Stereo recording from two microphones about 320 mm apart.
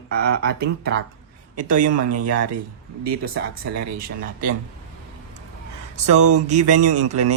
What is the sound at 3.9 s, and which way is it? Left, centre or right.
Speech, right.